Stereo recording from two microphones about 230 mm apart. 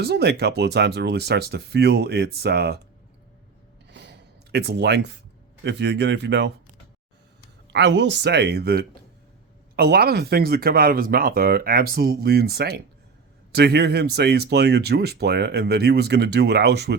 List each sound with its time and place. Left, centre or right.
0.0 s speech: right
3.8 s a sound: right
5.6 s speech: right
7.7 s speech: right